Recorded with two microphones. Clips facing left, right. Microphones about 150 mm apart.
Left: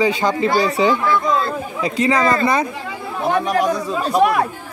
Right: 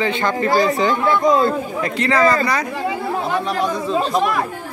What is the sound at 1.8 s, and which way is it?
Speech, 15° left (ahead or behind).